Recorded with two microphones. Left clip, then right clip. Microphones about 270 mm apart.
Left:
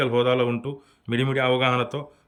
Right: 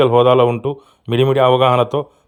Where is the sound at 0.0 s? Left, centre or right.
Centre.